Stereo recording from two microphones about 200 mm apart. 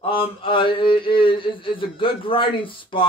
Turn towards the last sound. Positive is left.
turn(degrees=25)  # may be behind; listen again after turning